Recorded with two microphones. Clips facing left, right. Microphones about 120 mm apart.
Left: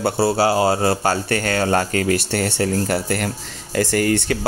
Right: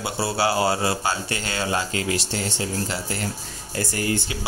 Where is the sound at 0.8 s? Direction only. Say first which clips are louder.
Left 6 dB; 50° left (ahead or behind).